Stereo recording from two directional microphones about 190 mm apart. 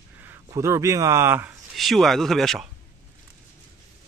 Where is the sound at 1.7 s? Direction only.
Centre (ahead or behind).